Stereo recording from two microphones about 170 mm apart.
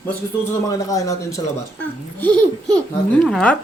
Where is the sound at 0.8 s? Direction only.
20° left (ahead or behind).